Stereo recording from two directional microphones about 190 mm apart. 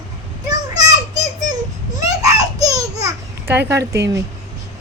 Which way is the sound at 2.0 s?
20° right (ahead or behind).